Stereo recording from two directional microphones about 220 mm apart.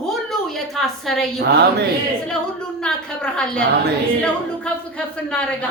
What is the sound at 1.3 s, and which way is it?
Speech, 50° right (ahead or behind).